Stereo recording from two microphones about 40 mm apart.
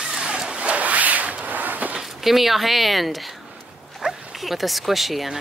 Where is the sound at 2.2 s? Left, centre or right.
Centre.